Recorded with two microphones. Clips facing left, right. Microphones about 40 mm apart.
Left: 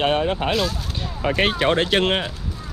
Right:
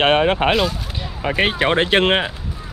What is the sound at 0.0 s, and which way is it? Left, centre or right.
Speech, right.